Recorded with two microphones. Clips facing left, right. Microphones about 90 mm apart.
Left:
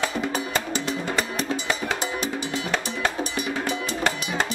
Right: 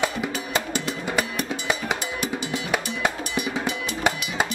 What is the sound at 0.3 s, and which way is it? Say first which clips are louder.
Music: even; 30° left (ahead or behind).